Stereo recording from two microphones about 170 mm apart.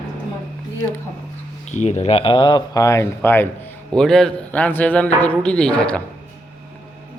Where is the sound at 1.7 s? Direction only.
40° left (ahead or behind); by 6.0 s 5° left (ahead or behind).